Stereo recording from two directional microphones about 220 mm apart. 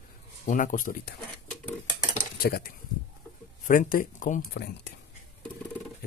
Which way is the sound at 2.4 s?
40° left (ahead or behind).